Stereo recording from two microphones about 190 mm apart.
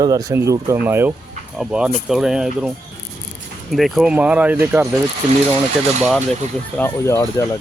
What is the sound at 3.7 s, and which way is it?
Speech, centre (ahead or behind).